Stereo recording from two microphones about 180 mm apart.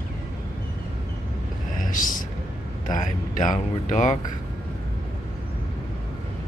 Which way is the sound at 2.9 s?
45° left (ahead or behind).